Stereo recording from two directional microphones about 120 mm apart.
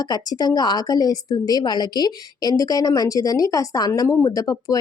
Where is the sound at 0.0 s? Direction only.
35° left (ahead or behind).